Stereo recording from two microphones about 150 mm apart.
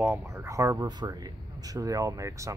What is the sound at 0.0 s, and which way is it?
Speech, 15° right (ahead or behind).